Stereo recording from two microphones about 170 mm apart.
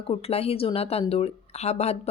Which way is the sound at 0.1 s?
35° left (ahead or behind).